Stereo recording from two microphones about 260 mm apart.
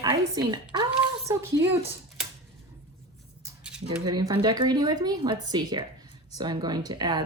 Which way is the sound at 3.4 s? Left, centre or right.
Centre.